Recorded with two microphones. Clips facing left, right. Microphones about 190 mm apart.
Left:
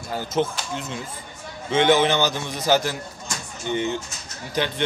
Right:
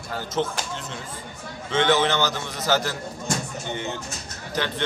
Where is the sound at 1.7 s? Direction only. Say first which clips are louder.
Left 3 dB; 15° left (ahead or behind).